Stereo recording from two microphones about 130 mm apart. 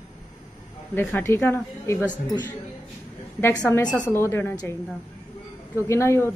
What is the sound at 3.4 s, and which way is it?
A woman's voice, 20° left (ahead or behind).